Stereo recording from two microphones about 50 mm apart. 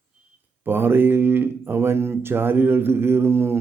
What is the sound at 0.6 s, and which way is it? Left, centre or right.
Speech, right.